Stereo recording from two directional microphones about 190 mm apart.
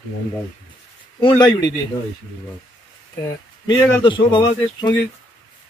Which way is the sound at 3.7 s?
25° left (ahead or behind).